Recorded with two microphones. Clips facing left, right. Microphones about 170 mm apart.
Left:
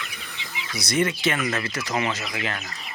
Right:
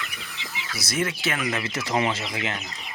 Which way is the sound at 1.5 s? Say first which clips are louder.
Even; 20° right (ahead or behind).